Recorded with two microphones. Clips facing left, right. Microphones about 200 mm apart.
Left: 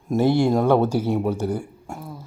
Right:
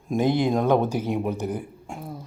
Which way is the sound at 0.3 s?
10° left (ahead or behind).